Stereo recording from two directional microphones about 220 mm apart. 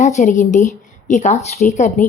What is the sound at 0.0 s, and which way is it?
A woman's voice, 35° left (ahead or behind).